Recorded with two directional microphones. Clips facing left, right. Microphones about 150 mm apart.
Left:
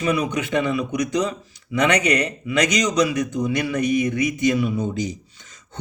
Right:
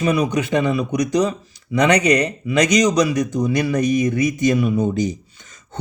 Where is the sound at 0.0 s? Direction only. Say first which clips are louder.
Right 3 dB; 35° right (ahead or behind).